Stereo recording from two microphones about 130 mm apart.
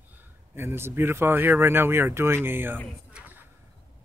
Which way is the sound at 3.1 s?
15° right (ahead or behind).